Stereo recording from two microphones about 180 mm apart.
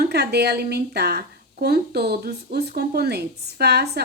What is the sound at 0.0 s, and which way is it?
Speech, 65° right (ahead or behind).